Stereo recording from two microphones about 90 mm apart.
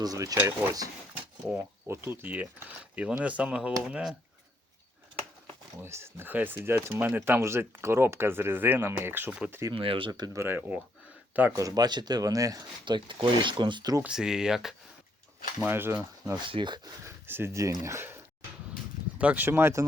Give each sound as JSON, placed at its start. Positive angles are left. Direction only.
{"t": 0.0, "sound": "speech", "side_deg": -40}
{"t": 0.3, "sound": "speech", "side_deg": -25}
{"t": 5.8, "sound": "speech", "side_deg": -30}
{"t": 9.7, "sound": "speech", "side_deg": -90}
{"t": 10.1, "sound": "speech", "side_deg": -50}
{"t": 10.3, "sound": "speech", "side_deg": -25}
{"t": 11.5, "sound": "speech", "side_deg": -45}
{"t": 12.8, "sound": "speech", "side_deg": -65}
{"t": 14.0, "sound": "speech", "side_deg": -5}
{"t": 15.6, "sound": "speech", "side_deg": -25}
{"t": 16.5, "sound": "speech", "side_deg": -60}
{"t": 17.2, "sound": "speech", "side_deg": -25}
{"t": 19.2, "sound": "speech", "side_deg": -15}
{"t": 19.5, "sound": "speech", "side_deg": -25}